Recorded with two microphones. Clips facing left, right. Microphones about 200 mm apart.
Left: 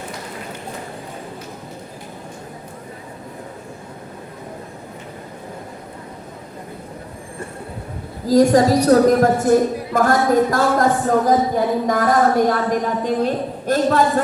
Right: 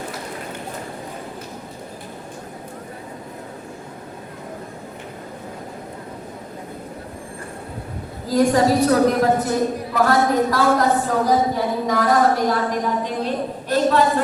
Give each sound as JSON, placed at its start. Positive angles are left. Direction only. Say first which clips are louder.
{"t": 8.3, "sound": "a woman's voice", "louder": "left 3 dB", "side_deg": 40}